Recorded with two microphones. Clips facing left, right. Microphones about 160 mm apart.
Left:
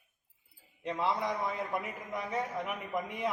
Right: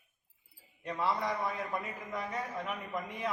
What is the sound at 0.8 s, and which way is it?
A man's voice, 20° left (ahead or behind).